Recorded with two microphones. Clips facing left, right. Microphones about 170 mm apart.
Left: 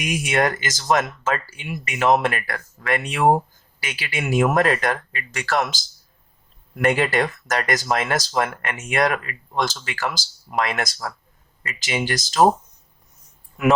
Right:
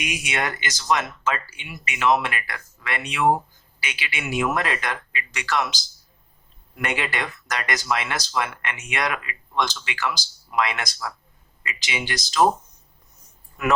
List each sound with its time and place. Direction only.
0.0 s speech: 45° left (ahead or behind)